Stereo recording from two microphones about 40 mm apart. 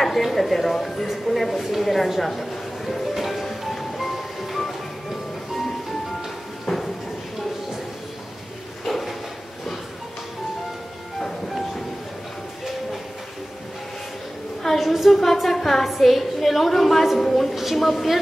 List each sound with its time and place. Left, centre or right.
0.0 s speech: centre
3.4 s music: centre
6.6 s a sound: centre
8.8 s drawer open or close: centre
11.1 s train: centre
14.6 s a woman's voice: centre